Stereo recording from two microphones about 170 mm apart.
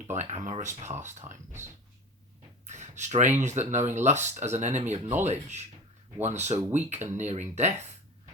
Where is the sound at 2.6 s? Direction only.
45° right (ahead or behind).